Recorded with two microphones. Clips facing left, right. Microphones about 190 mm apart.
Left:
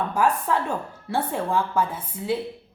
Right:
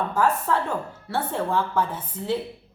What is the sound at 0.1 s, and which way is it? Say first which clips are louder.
Speech: left 1 dB; 15° left (ahead or behind).